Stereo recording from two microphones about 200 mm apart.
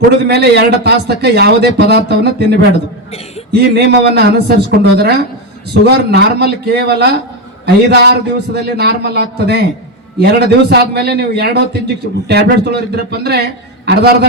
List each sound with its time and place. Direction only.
0.3 s a man's voice: 55° right (ahead or behind)